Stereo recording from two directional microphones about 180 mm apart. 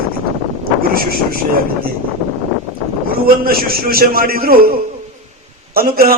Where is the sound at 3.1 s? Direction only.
55° right (ahead or behind).